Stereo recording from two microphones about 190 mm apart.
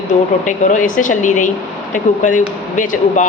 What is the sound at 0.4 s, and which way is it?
Speech, 40° left (ahead or behind).